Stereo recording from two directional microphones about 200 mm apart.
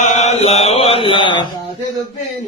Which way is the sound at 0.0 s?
35° left (ahead or behind).